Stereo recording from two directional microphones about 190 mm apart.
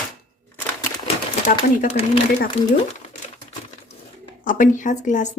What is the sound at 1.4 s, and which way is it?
Speech, 40° left (ahead or behind).